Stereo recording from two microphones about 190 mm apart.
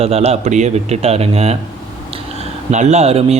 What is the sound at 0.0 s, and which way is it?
A man's voice, 35° right (ahead or behind).